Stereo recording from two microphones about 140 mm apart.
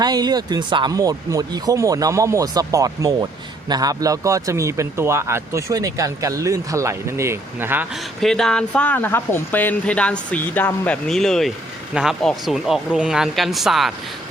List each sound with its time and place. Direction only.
0.0 s speech: 30° right (ahead or behind)
8.2 s speech: 5° left (ahead or behind)